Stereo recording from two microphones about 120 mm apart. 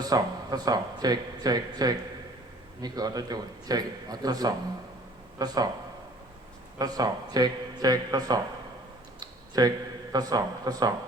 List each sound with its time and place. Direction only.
0.0 s a man's voice: 30° right (ahead or behind)
6.7 s a man's voice: 35° right (ahead or behind)